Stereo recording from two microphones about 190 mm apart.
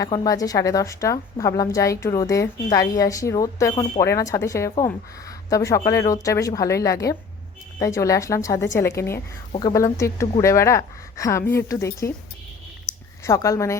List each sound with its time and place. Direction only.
0.0 s a woman's voice: 20° left (ahead or behind)
12.9 s a sound: 20° left (ahead or behind)
13.2 s a woman's voice: 15° left (ahead or behind)